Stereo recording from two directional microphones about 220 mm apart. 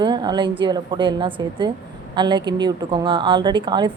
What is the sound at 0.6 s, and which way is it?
A woman's voice, 20° right (ahead or behind).